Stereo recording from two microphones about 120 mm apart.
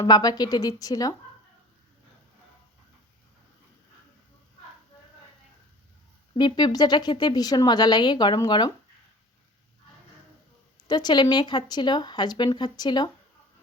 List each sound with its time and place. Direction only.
0.0 s speech: 30° left (ahead or behind)
6.3 s speech: 40° left (ahead or behind)
10.8 s speech: 35° left (ahead or behind)